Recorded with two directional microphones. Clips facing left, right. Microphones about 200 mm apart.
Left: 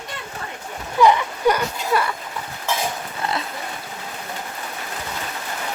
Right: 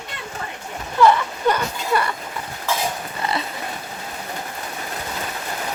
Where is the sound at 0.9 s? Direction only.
15° left (ahead or behind).